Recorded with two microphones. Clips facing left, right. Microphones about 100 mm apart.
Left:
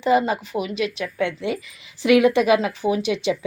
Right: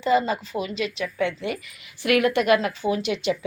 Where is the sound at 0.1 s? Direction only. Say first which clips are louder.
Left 2 dB; 15° left (ahead or behind).